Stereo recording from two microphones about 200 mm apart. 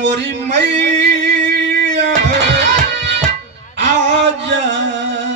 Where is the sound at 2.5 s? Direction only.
60° right (ahead or behind).